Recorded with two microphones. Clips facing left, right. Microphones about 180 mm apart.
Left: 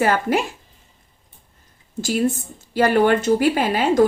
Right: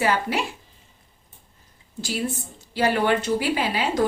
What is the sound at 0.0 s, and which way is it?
Speech, 50° left (ahead or behind).